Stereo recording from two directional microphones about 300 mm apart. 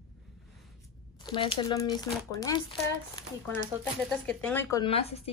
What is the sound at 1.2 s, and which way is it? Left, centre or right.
A woman's voice, centre.